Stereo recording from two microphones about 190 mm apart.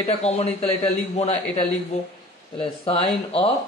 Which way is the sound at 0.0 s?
35° left (ahead or behind).